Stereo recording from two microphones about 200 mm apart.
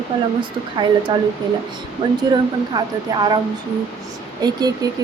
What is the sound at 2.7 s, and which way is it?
Speech, 20° right (ahead or behind).